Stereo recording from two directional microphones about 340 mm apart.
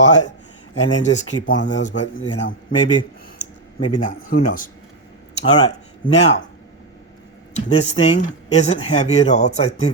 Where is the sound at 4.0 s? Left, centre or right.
Left.